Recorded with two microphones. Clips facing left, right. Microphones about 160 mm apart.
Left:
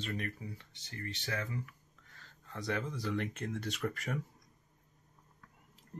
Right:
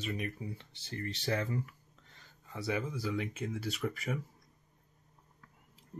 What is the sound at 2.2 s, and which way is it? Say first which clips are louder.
Speech: right 1 dB; 10° right (ahead or behind).